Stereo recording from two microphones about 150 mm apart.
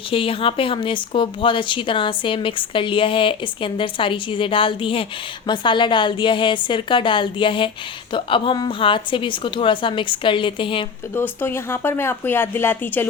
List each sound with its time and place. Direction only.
0.1 s a woman's voice: 35° left (ahead or behind)
11.1 s speech: 15° left (ahead or behind)